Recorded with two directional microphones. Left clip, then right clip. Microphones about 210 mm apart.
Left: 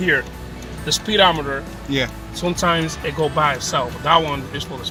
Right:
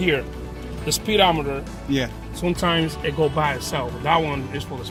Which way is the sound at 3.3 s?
30° right (ahead or behind).